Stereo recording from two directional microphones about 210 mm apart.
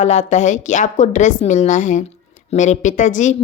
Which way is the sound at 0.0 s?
35° left (ahead or behind).